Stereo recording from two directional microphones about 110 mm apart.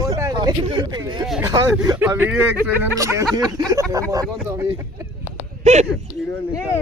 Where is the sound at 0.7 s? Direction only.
45° right (ahead or behind).